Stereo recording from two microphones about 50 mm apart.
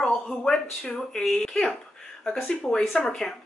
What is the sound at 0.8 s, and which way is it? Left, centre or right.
Speech, left.